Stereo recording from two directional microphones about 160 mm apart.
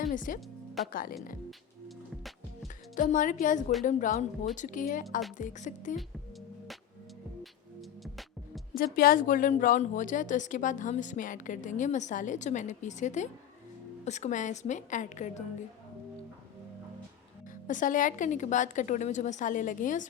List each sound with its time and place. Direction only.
0.0 s speech: 55° left (ahead or behind)
0.8 s speech: centre (ahead or behind)
2.9 s a woman's voice: 55° left (ahead or behind)
8.7 s a woman's voice: 65° left (ahead or behind)
17.7 s a woman's voice: 55° left (ahead or behind)